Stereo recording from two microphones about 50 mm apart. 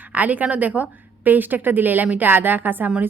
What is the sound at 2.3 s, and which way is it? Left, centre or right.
Speech, right.